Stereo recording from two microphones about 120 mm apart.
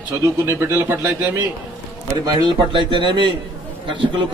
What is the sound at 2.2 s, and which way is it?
A man's voice, 40° right (ahead or behind).